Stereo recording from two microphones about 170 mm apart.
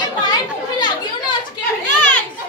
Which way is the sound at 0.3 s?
25° left (ahead or behind).